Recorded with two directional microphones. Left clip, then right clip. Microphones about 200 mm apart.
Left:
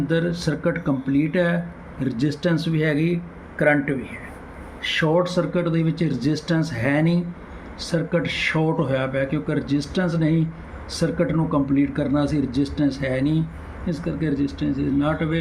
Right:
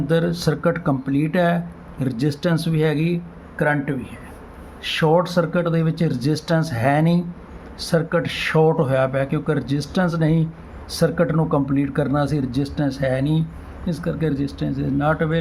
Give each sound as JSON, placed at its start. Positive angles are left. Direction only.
{"t": 0.1, "sound": "speech", "side_deg": -50}